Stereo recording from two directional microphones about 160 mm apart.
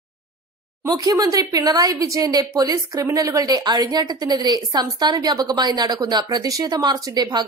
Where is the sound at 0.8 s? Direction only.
25° right (ahead or behind).